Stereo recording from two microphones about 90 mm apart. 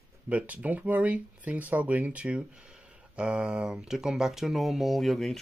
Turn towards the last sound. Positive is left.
turn(degrees=0)  # may be behind; listen again after turning